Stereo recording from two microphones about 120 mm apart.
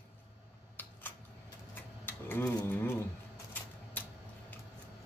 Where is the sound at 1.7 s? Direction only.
15° left (ahead or behind).